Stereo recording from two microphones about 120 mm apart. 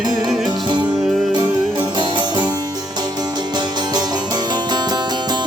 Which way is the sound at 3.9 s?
35° right (ahead or behind).